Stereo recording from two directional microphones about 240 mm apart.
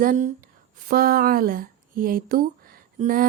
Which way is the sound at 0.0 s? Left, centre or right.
Right.